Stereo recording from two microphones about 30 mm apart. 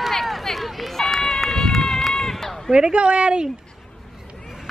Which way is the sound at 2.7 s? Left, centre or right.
Right.